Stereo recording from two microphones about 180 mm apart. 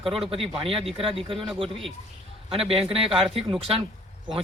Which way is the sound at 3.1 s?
Centre (ahead or behind).